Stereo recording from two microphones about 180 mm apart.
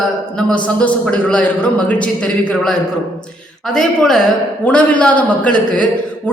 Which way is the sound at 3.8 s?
5° left (ahead or behind).